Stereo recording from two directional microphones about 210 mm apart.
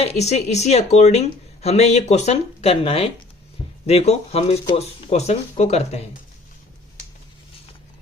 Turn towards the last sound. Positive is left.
turn(degrees=30)  # may be behind; listen again after turning